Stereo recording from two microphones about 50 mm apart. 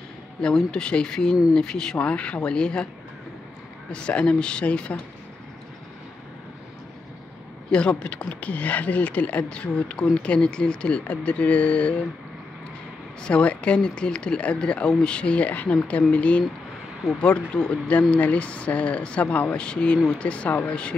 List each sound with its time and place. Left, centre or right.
0.6 s speech: centre
2.0 s speech: left
3.9 s speech: left
7.7 s speech: left
13.3 s speech: left